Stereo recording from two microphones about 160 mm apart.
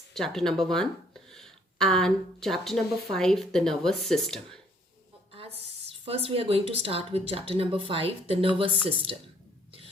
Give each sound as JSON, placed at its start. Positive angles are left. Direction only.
{"t": 0.1, "sound": "speech", "side_deg": 0}
{"t": 5.3, "sound": "a woman's voice", "side_deg": -35}